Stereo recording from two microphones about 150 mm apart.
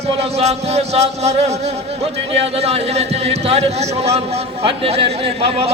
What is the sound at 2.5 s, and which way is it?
A man's voice, 45° right (ahead or behind).